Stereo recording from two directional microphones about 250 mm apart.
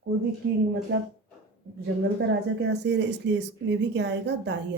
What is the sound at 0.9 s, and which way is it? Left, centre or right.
Speech, right.